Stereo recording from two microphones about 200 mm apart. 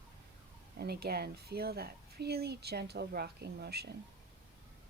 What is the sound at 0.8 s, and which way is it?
Speech, 50° right (ahead or behind).